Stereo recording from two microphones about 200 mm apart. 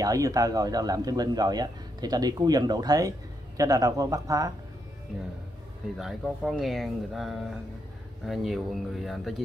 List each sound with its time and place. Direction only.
0.0 s speech: 15° right (ahead or behind)
5.9 s speech: centre (ahead or behind)